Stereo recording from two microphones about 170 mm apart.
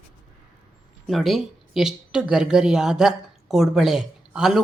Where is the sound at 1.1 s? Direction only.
Centre (ahead or behind).